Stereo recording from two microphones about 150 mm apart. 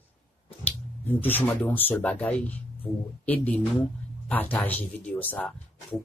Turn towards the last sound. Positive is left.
turn(degrees=10)  # may be behind; listen again after turning